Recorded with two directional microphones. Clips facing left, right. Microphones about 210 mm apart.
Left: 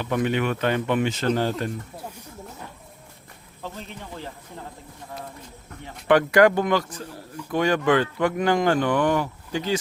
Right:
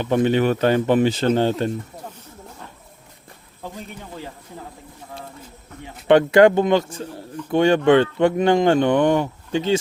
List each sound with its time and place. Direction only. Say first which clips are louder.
0.0 s speech: right 6 dB; 30° right (ahead or behind)
3.6 s speech: right 2 dB; 10° right (ahead or behind)
6.1 s speech: right 4 dB; 25° right (ahead or behind)